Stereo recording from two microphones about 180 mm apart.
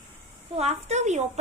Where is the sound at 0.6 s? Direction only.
35° right (ahead or behind).